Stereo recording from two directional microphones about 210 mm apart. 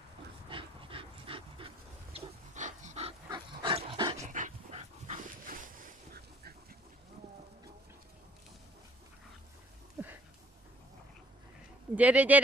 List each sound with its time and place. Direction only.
0.5 s dog: 25° right (ahead or behind)
4.3 s dog: 35° right (ahead or behind)
10.0 s a sound: 10° right (ahead or behind)
11.9 s speech: 5° right (ahead or behind)